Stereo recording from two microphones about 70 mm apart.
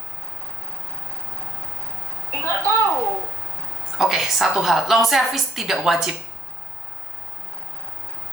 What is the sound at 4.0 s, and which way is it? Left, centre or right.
A woman's voice, centre.